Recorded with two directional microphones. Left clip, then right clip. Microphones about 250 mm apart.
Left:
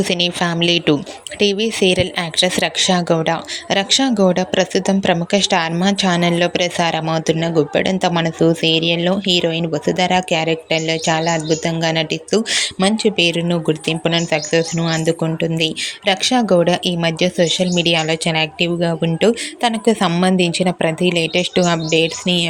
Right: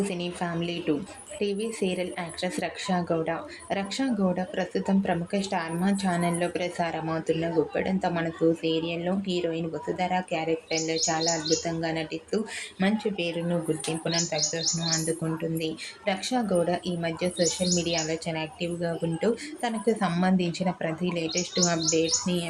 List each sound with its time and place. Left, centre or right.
0.3 s speech: left